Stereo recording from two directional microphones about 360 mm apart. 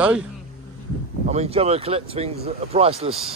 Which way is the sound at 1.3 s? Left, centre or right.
Centre.